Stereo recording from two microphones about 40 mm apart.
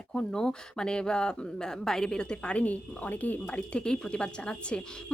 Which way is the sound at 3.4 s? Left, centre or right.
Left.